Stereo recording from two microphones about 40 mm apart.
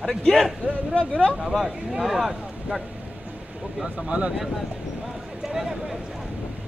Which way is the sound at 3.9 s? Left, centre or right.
Right.